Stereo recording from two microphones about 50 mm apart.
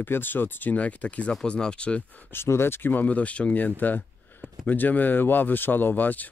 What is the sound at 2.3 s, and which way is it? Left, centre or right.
Speech, left.